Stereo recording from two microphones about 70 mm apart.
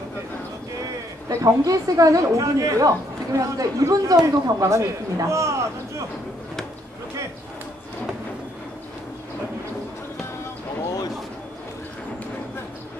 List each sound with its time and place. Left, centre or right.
1.3 s a man's voice: right
4.6 s speech: right